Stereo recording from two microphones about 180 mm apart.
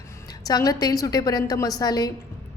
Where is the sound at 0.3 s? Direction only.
20° left (ahead or behind).